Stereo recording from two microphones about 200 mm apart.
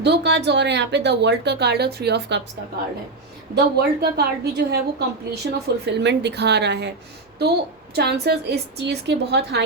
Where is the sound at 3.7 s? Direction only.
50° right (ahead or behind).